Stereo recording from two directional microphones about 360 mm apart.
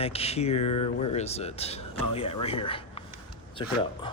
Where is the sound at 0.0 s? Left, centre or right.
Centre.